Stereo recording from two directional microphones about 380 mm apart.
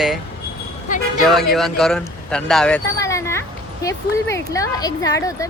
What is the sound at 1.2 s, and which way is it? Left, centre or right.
Speech, centre.